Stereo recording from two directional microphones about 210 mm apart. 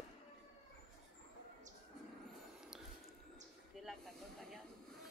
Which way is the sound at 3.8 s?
Centre (ahead or behind).